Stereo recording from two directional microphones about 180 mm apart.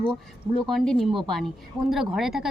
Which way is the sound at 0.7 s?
Centre (ahead or behind).